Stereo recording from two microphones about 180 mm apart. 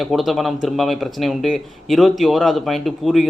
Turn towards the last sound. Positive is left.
turn(degrees=0)  # may be behind; listen again after turning